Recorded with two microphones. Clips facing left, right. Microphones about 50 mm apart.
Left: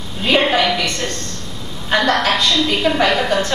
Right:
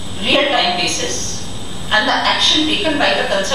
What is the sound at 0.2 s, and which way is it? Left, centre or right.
Speech, left.